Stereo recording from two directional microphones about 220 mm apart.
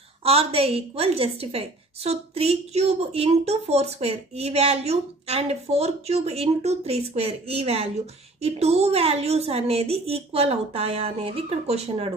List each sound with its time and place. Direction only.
0.2 s a woman's voice: 25° right (ahead or behind)